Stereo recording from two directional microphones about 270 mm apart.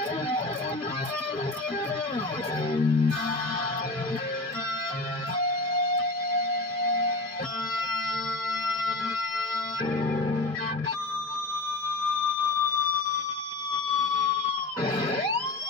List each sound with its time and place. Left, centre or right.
2.7 s music: centre
10.0 s music: left
14.9 s music: centre